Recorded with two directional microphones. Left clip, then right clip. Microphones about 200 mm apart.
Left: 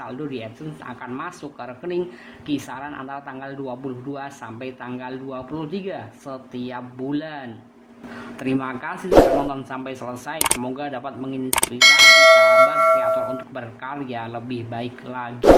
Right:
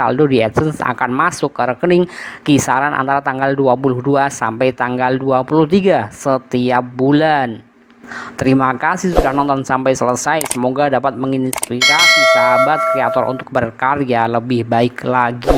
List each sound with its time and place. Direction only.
0.0 s speech: 45° right (ahead or behind)
11.8 s speech: centre (ahead or behind)
13.3 s speech: 40° right (ahead or behind)